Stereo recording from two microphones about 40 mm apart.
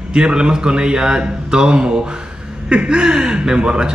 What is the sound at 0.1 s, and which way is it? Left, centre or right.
Speech, right.